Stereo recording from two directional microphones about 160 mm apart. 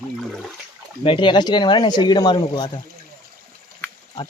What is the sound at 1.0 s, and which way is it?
Speech, 30° left (ahead or behind).